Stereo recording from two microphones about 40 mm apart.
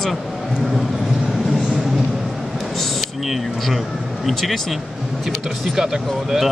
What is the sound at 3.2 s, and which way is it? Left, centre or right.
Speech, centre.